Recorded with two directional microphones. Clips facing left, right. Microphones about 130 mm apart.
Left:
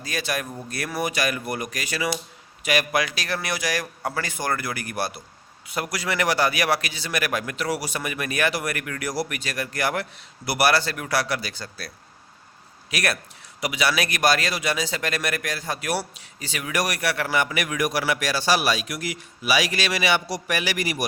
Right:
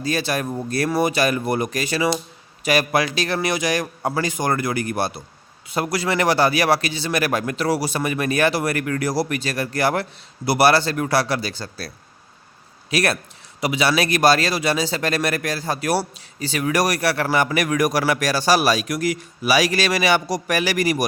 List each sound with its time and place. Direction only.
0.0 s a man's voice: 30° right (ahead or behind)
12.9 s a man's voice: 30° right (ahead or behind)